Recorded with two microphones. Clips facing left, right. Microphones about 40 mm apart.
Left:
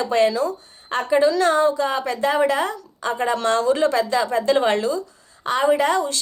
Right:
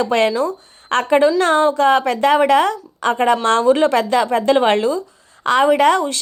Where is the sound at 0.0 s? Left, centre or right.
Right.